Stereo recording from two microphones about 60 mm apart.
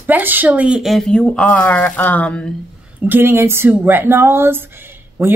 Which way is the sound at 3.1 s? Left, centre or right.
Right.